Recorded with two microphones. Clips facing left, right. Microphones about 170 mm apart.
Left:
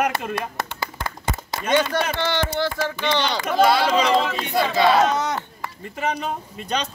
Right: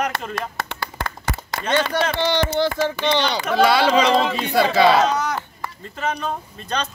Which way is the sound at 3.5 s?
75° right (ahead or behind).